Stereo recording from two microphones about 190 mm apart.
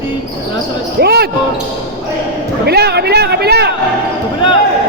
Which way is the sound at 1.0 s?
55° right (ahead or behind).